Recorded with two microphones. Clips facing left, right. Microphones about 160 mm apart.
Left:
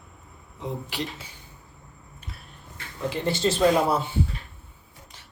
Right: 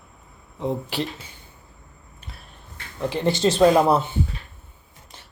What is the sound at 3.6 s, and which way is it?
Speech, 55° right (ahead or behind).